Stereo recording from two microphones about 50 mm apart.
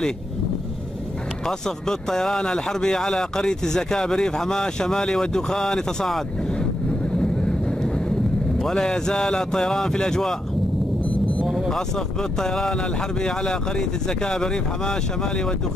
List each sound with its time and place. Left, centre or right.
1.4 s speech: centre
7.2 s vehicle: centre
8.5 s speech: centre
11.4 s a sound: centre
11.7 s speech: centre